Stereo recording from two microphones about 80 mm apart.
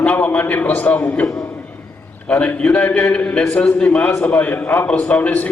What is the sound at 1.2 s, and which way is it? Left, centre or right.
Speech, left.